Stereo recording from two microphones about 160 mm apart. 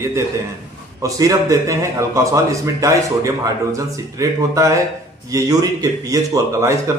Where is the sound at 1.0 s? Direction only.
20° right (ahead or behind).